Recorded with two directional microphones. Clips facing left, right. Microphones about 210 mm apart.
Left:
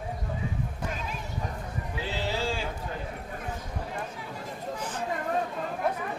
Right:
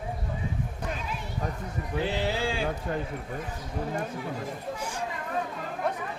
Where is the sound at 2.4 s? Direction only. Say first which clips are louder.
Right 1 dB; 55° right (ahead or behind).